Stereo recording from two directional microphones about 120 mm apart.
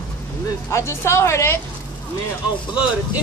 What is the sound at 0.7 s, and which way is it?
Speech, 25° left (ahead or behind).